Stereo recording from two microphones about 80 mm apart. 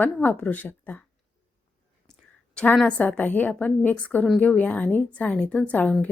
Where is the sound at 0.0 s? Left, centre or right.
Left.